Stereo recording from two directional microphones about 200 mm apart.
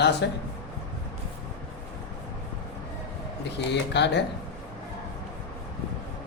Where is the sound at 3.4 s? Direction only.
60° left (ahead or behind).